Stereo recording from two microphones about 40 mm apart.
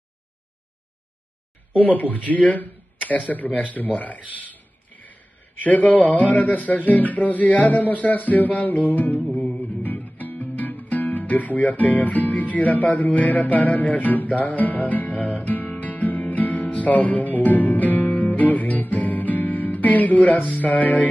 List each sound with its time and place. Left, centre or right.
1.8 s music: left
4.4 s a sound: left
5.6 s music: left
9.8 s speech: left
15.7 s music: left